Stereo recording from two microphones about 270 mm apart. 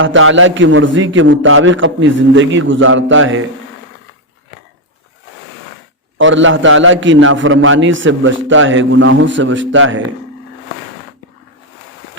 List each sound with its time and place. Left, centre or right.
0.0 s a man's voice: right
6.1 s a man's voice: right